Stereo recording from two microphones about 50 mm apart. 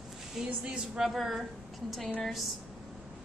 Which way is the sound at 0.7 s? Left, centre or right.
Centre.